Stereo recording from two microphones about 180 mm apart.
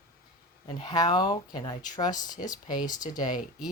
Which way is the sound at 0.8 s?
25° left (ahead or behind).